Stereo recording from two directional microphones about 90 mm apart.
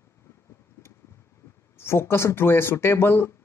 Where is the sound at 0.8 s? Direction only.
30° left (ahead or behind).